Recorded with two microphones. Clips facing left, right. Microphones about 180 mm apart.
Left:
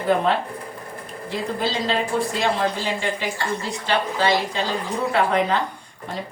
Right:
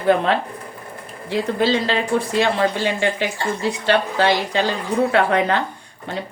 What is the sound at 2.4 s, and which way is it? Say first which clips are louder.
A woman's voice: right 4 dB; 70° right (ahead or behind).